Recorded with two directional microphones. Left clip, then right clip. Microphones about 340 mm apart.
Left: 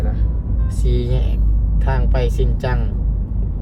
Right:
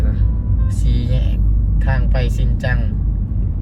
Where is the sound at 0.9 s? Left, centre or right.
Centre.